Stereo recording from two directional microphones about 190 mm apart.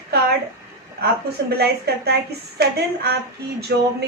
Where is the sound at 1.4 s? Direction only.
65° right (ahead or behind).